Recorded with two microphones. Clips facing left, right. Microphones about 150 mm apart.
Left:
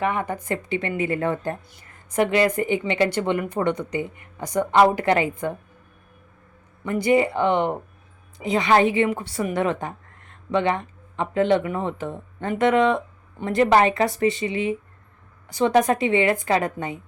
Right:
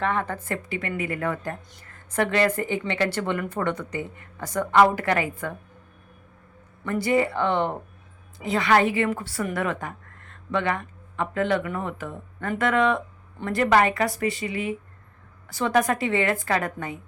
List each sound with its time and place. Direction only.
0.0 s speech: 10° left (ahead or behind)
6.8 s a woman's voice: 20° left (ahead or behind)